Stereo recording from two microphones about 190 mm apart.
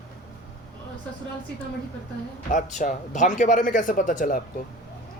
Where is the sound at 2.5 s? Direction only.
40° left (ahead or behind).